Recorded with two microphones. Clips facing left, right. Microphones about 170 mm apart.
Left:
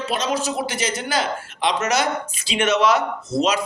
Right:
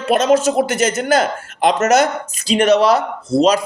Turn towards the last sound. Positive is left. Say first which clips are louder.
# right 7 dB
turn(degrees=-35)  # may be behind; listen again after turning